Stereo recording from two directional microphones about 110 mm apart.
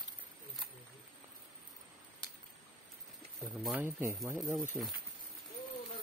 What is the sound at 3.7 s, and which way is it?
Speech, 20° right (ahead or behind).